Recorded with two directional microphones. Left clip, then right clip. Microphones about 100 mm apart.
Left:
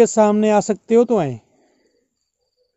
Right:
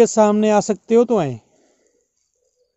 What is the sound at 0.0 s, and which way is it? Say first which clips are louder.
Speech: even; 10° left (ahead or behind).